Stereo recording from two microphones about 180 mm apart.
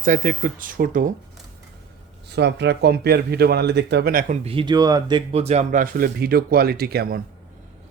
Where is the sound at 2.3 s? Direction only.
70° right (ahead or behind); by 4.4 s 55° right (ahead or behind).